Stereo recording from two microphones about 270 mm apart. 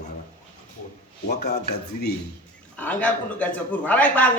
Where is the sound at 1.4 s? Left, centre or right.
Left.